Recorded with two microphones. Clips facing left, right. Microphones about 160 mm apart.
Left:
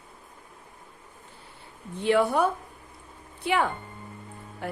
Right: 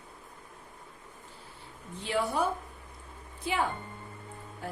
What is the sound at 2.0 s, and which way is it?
A woman's voice, 60° left (ahead or behind).